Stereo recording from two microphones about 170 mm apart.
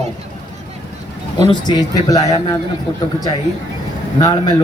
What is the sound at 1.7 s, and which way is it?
Speech, 20° left (ahead or behind).